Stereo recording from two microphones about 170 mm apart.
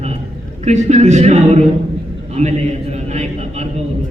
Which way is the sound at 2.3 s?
40° right (ahead or behind).